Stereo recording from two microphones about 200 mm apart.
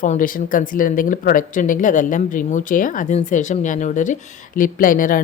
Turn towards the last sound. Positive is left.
turn(degrees=45)  # may be behind; listen again after turning